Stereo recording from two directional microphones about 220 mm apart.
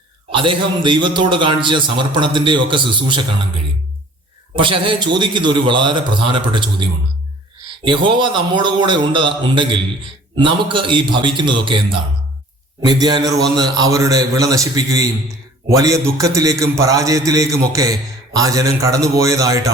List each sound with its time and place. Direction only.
0.3 s a man's voice: 25° right (ahead or behind)
4.5 s a man's voice: 20° right (ahead or behind)
7.9 s a man's voice: 20° right (ahead or behind)